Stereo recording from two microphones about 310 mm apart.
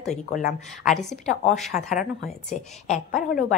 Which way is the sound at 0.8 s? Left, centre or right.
Centre.